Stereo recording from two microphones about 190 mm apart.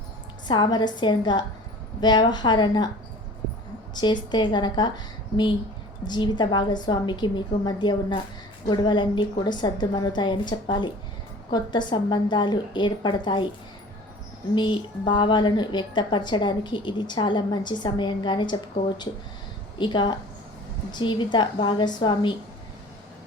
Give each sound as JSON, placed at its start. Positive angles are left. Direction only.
{"t": 0.4, "sound": "a woman's voice", "side_deg": 25}
{"t": 3.9, "sound": "a woman's voice", "side_deg": 25}
{"t": 14.5, "sound": "a woman's voice", "side_deg": 25}